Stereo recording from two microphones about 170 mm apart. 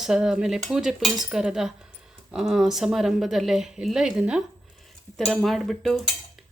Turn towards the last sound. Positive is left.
turn(degrees=0)  # may be behind; listen again after turning